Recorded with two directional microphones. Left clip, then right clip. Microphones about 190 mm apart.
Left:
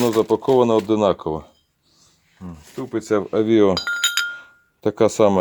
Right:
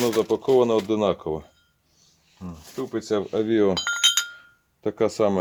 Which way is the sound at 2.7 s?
40° left (ahead or behind).